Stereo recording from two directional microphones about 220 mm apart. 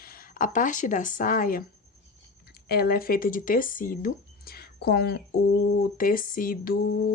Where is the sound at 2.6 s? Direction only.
45° left (ahead or behind).